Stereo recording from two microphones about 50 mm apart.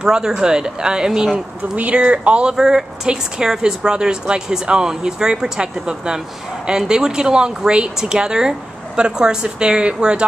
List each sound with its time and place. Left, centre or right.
0.0 s speech: centre
1.3 s speech: right
2.5 s speech: centre